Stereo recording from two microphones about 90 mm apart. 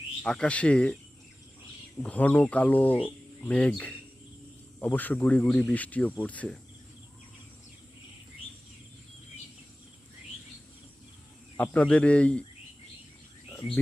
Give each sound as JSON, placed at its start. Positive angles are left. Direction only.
{"t": 0.2, "sound": "speech", "side_deg": 10}
{"t": 2.0, "sound": "speech", "side_deg": 15}
{"t": 5.5, "sound": "speech", "side_deg": 5}
{"t": 5.7, "sound": "speech", "side_deg": 15}
{"t": 11.5, "sound": "speech", "side_deg": 20}